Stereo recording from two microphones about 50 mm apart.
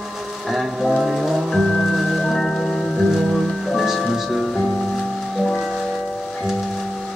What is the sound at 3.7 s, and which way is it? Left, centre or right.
Music, centre.